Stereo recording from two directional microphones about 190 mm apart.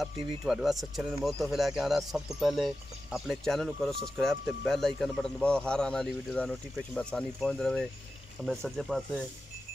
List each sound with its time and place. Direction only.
0.0 s speech: centre (ahead or behind)